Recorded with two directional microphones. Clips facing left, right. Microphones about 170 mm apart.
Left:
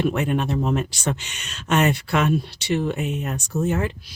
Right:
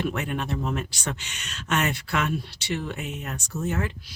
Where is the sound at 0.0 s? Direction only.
25° left (ahead or behind).